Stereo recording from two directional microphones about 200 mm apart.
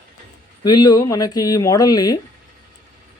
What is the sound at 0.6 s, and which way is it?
Speech, 20° left (ahead or behind).